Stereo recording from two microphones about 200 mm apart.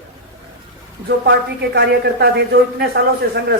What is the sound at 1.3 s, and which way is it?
A woman's voice, 55° right (ahead or behind).